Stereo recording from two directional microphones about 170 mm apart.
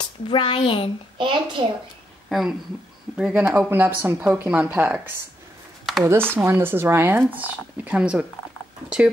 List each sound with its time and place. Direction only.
0.0 s speech: 25° left (ahead or behind)
1.1 s a child's voice: 30° right (ahead or behind)
2.2 s speech: centre (ahead or behind)